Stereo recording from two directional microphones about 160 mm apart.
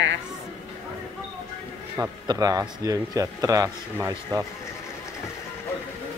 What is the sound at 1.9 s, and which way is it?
A man's voice, 20° right (ahead or behind).